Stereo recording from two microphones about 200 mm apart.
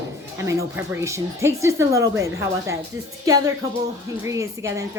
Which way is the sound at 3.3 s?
15° right (ahead or behind).